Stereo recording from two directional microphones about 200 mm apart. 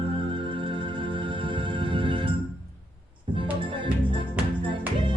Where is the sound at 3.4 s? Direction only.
25° right (ahead or behind).